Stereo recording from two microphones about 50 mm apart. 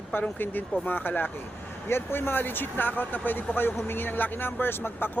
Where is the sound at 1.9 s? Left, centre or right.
Left.